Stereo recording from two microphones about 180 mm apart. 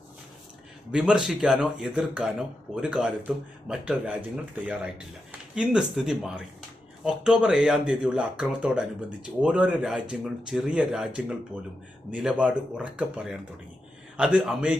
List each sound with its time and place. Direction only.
0.9 s speech: 5° right (ahead or behind)